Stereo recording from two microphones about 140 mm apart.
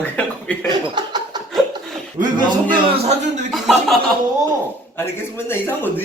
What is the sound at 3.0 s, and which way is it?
Speech, 50° right (ahead or behind).